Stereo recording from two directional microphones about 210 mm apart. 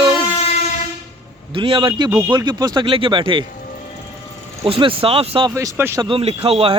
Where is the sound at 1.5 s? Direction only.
25° right (ahead or behind).